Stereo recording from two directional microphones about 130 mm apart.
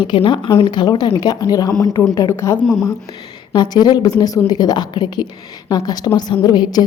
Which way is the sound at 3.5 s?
30° left (ahead or behind).